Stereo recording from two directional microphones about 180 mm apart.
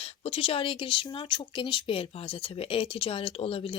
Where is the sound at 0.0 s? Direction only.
35° left (ahead or behind).